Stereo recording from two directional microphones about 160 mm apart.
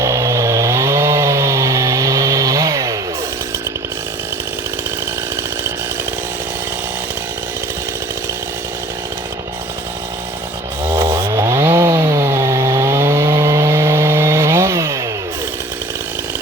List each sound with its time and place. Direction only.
0.0 s chainsaw: 20° right (ahead or behind)
10.8 s chainsaw: 15° right (ahead or behind)